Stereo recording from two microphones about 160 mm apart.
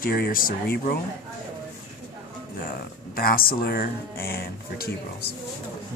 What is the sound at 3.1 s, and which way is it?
Speech, 65° left (ahead or behind).